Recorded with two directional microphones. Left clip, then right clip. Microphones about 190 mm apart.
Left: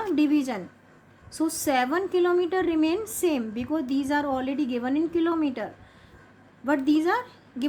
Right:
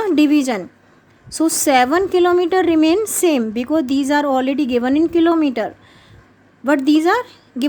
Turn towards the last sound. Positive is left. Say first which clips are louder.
# right 9 dB
turn(degrees=-50)  # may be behind; listen again after turning